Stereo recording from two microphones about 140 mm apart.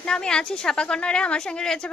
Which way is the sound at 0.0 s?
5° left (ahead or behind).